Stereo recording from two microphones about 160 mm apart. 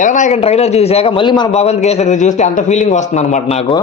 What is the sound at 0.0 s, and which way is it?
Speech, 50° left (ahead or behind).